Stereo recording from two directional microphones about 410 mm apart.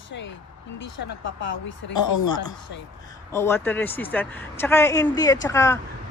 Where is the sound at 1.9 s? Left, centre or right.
Left.